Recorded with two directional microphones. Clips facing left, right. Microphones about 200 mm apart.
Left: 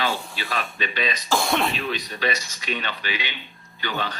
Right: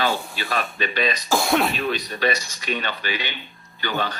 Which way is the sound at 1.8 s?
45° right (ahead or behind).